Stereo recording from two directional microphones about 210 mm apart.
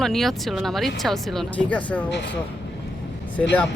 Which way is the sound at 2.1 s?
55° left (ahead or behind).